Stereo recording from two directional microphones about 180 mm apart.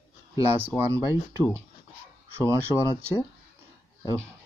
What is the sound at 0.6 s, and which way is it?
Speech, 10° right (ahead or behind).